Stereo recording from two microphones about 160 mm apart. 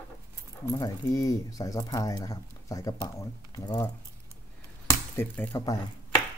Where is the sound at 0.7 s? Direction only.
25° left (ahead or behind).